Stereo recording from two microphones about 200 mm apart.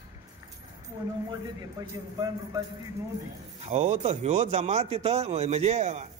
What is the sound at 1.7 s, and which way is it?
Speech, 20° right (ahead or behind).